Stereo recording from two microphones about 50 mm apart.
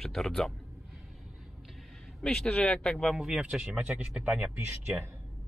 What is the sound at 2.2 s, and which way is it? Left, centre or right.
Speech, centre.